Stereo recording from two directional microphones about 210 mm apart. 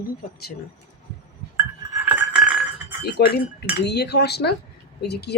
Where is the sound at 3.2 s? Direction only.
50° left (ahead or behind).